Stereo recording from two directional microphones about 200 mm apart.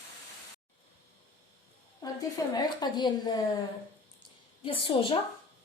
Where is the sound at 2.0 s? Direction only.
20° left (ahead or behind).